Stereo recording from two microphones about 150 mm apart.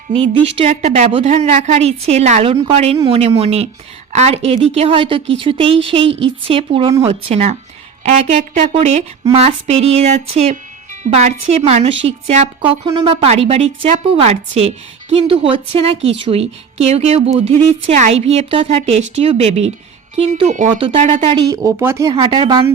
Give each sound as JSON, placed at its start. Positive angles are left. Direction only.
{"t": 0.1, "sound": "a woman's voice", "side_deg": -40}
{"t": 8.7, "sound": "a woman's voice", "side_deg": -40}
{"t": 20.7, "sound": "speech", "side_deg": -35}
{"t": 21.6, "sound": "speech", "side_deg": -20}
{"t": 22.1, "sound": "speech", "side_deg": -35}